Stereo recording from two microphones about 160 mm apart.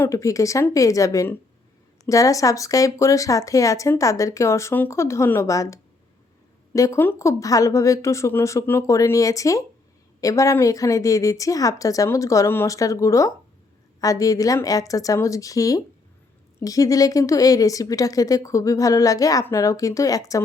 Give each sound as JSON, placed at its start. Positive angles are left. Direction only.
{"t": 0.0, "sound": "a woman's voice", "side_deg": 20}